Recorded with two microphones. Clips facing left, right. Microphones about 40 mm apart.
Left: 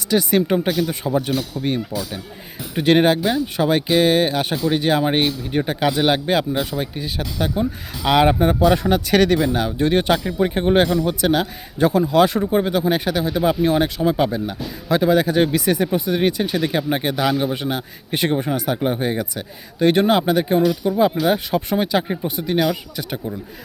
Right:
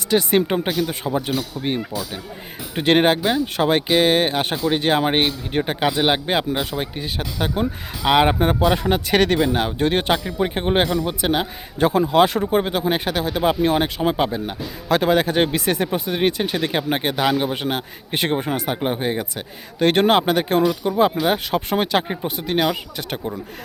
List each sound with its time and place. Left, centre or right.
0.1 s speech: right
0.7 s a man's voice: centre
2.7 s speech: right
4.5 s speech: right
4.8 s speech: right
8.0 s speech: right
8.6 s speech: right
10.3 s speech: right
11.8 s speech: right
14.8 s speech: right
17.5 s speech: right
18.9 s speech: right
19.2 s speech: right
20.6 s speech: right